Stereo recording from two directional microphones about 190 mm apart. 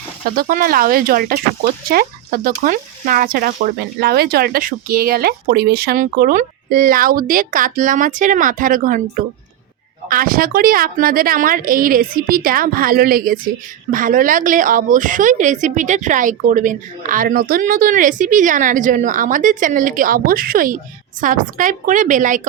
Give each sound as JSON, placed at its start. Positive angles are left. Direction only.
{"t": 0.3, "sound": "speech", "side_deg": -50}